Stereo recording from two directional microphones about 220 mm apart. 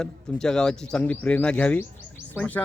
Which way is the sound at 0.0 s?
5° left (ahead or behind).